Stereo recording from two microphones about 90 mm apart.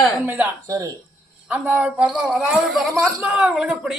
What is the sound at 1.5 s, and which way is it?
Speech, 15° right (ahead or behind).